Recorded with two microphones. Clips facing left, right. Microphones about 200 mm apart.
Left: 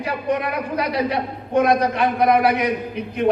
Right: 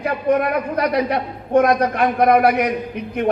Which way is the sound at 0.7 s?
55° right (ahead or behind).